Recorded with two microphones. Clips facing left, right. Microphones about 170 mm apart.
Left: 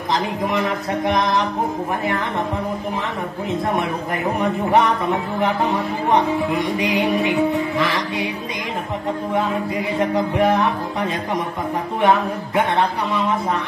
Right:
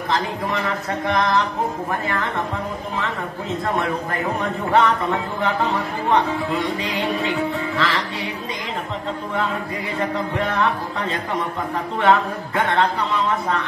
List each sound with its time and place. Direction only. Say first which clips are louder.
0.1 s speech: left 3 dB; 15° left (ahead or behind)
4.4 s speech: left 2 dB; 15° left (ahead or behind)
9.9 s speech: left 4 dB; 15° left (ahead or behind)
12.0 s speech: even; 15° left (ahead or behind)